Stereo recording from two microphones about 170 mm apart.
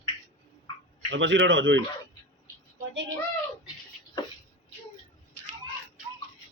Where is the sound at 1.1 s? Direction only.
90° right.